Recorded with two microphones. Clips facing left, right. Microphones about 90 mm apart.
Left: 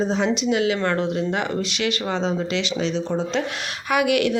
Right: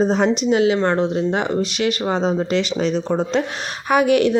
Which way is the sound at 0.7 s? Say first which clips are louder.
Right 4 dB; 25° right (ahead or behind).